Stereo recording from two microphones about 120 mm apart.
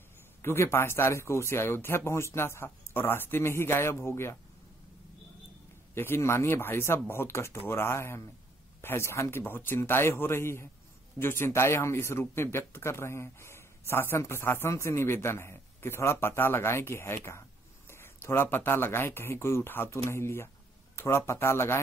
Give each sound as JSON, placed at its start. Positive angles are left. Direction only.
{"t": 0.4, "sound": "speech", "side_deg": 20}
{"t": 5.9, "sound": "speech", "side_deg": 20}